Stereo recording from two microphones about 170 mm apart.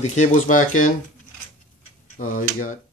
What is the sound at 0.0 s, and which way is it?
Speech, 45° left (ahead or behind).